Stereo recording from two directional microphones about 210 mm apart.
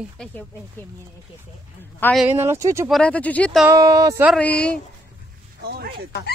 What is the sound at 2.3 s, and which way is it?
Speech, 10° right (ahead or behind).